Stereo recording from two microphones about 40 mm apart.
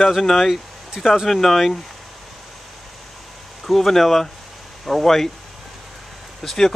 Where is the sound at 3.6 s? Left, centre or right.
Centre.